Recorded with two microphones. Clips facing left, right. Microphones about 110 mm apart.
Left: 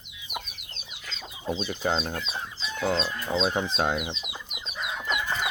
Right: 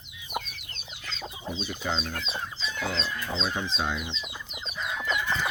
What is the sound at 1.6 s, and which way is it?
Speech, 50° left (ahead or behind).